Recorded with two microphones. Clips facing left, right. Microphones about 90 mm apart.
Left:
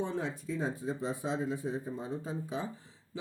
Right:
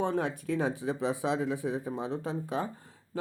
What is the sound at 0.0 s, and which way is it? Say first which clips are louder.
Speech: right 5 dB; 60° right (ahead or behind).